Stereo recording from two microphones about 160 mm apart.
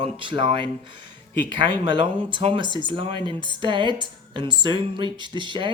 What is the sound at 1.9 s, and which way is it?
A woman's voice, 30° right (ahead or behind).